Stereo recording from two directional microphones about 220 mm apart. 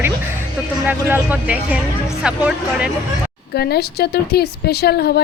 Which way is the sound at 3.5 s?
45° left (ahead or behind).